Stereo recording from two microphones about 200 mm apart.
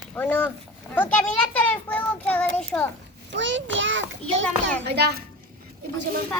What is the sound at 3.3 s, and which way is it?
A child's voice, 65° right (ahead or behind).